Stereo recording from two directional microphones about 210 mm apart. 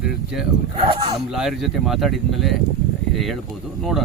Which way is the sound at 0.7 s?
25° right (ahead or behind).